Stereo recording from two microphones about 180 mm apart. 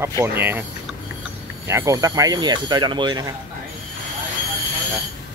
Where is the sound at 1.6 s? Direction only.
15° right (ahead or behind).